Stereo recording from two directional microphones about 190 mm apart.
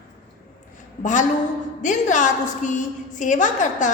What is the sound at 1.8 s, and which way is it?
A woman's voice, 40° left (ahead or behind).